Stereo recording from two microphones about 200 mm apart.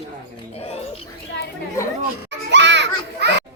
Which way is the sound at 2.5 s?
60° right (ahead or behind).